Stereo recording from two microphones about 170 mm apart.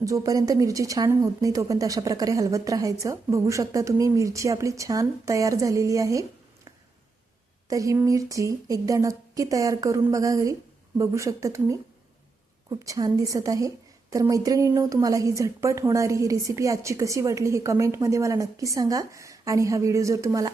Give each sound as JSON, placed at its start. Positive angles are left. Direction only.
{"t": 0.0, "sound": "a woman's voice", "side_deg": -20}
{"t": 7.7, "sound": "a woman's voice", "side_deg": -20}
{"t": 12.8, "sound": "a woman's voice", "side_deg": -20}